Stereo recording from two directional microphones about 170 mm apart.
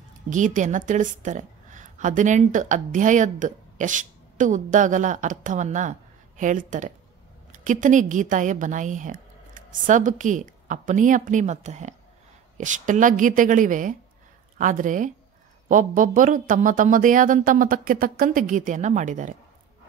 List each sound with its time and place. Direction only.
0.3 s a woman's voice: 50° right (ahead or behind)